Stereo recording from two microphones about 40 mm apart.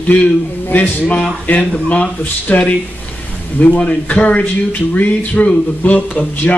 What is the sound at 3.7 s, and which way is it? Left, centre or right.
Speech, left.